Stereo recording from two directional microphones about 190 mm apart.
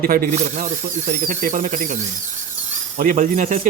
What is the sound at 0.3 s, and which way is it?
A man's voice, 35° right (ahead or behind).